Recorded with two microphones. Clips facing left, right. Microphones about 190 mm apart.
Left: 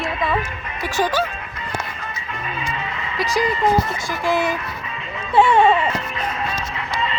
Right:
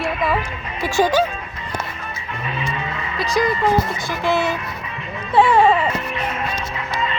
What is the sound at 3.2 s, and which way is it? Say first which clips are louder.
Speech: right 1 dB; 15° left (ahead or behind).